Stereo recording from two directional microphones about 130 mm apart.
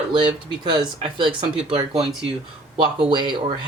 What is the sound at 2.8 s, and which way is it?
Speech, 35° right (ahead or behind).